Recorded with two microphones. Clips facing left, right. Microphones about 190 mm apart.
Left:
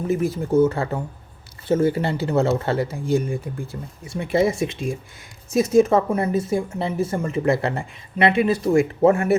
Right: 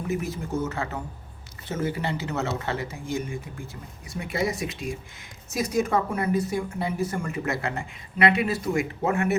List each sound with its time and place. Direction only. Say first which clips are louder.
0.1 s a woman's voice: left 9 dB; 30° left (ahead or behind)